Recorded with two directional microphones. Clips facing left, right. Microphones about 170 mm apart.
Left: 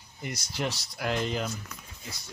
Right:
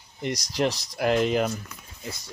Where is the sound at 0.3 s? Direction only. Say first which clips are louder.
Right 7 dB; 40° right (ahead or behind).